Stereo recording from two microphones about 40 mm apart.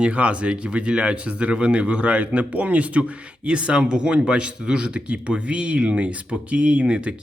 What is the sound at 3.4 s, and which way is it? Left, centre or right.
Speech, right.